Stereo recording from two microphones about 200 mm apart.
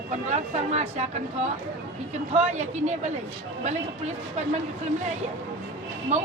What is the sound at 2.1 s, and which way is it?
Speech, 30° right (ahead or behind).